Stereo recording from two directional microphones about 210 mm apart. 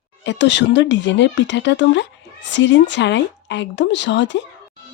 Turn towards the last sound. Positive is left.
turn(degrees=55)  # may be behind; listen again after turning